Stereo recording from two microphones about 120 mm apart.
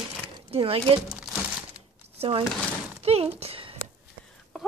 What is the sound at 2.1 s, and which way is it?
Speech, 45° right (ahead or behind).